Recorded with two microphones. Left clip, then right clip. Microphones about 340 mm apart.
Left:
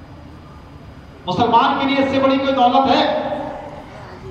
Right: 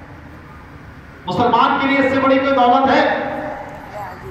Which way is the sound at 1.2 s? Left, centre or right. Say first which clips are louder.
Even; centre.